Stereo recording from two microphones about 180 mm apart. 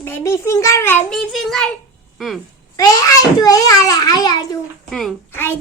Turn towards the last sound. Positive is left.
turn(degrees=10)  # may be behind; listen again after turning